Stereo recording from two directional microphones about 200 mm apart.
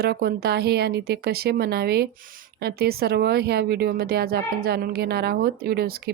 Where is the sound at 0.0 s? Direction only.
50° right (ahead or behind).